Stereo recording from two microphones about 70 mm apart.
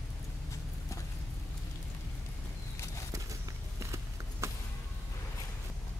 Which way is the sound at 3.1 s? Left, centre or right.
Right.